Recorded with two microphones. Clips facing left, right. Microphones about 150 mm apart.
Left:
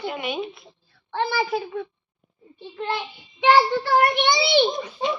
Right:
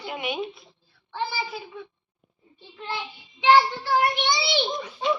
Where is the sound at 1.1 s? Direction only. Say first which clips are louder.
Left 7 dB; 60° left (ahead or behind).